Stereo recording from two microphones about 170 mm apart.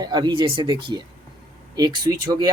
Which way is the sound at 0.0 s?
25° right (ahead or behind).